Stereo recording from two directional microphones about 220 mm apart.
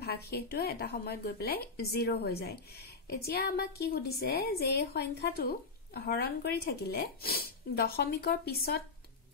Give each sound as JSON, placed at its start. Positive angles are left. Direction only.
{"t": 0.0, "sound": "speech", "side_deg": 45}